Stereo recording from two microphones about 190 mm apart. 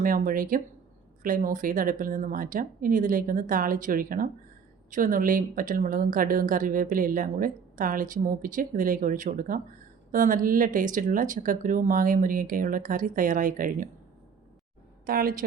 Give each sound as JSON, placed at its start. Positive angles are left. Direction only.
{"t": 0.0, "sound": "speech", "side_deg": -45}
{"t": 15.0, "sound": "speech", "side_deg": -50}